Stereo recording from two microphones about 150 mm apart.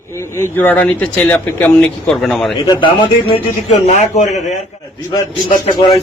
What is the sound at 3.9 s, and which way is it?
Speech, 50° left (ahead or behind).